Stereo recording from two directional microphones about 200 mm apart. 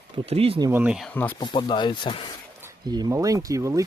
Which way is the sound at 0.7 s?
5° right (ahead or behind).